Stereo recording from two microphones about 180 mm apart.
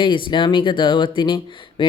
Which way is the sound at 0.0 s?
25° left (ahead or behind).